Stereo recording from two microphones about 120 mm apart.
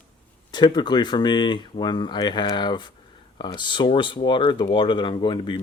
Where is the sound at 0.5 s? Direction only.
40° left (ahead or behind).